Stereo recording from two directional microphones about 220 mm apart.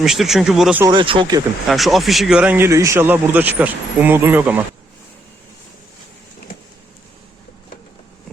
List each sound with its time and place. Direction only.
0.0 s speech: centre (ahead or behind)
0.9 s speech: 20° right (ahead or behind)
1.6 s speech: centre (ahead or behind)